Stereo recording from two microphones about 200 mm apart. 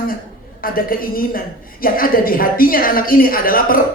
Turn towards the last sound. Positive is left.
turn(degrees=45)  # may be behind; listen again after turning